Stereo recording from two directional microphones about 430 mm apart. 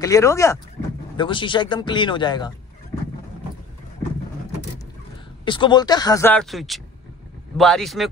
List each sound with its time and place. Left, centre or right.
0.0 s speech: centre
5.4 s speech: centre